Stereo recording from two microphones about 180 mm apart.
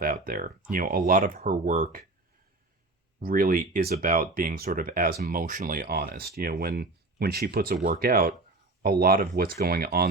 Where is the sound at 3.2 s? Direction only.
50° right (ahead or behind).